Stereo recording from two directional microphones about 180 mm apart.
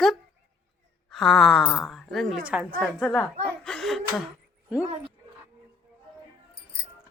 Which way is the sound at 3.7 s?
Centre (ahead or behind).